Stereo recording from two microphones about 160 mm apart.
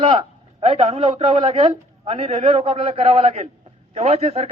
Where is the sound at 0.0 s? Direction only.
30° right (ahead or behind).